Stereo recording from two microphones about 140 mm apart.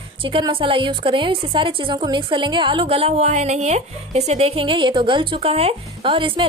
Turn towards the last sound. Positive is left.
turn(degrees=-40)  # may be behind; listen again after turning